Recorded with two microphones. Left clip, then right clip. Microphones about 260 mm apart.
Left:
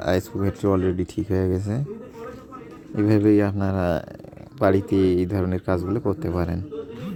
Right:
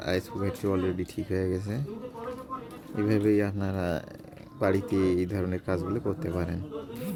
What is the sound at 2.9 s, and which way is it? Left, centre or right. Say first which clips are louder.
Speech: left 7 dB; centre.